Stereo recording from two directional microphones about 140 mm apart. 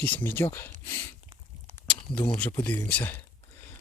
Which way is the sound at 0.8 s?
15° left (ahead or behind).